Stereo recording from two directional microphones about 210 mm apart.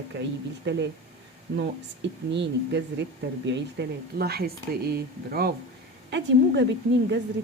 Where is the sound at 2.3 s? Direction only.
55° right (ahead or behind).